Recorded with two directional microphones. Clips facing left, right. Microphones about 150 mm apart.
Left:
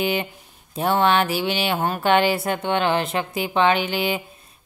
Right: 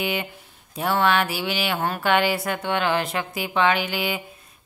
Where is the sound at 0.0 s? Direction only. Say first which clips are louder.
Left 3 dB; 30° left (ahead or behind).